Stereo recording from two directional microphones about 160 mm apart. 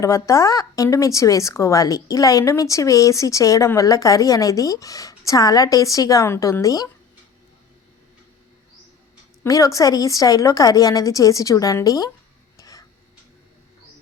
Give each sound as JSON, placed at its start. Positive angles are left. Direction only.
{"t": 0.0, "sound": "speech", "side_deg": 20}
{"t": 9.4, "sound": "speech", "side_deg": 20}
{"t": 12.5, "sound": "a sound", "side_deg": 20}